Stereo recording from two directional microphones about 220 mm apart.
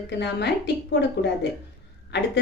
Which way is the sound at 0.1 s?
50° left (ahead or behind).